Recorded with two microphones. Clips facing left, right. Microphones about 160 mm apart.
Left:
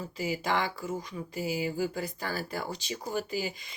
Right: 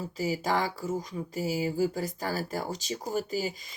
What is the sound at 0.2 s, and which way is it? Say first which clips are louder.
Speech: right 2 dB; 40° right (ahead or behind).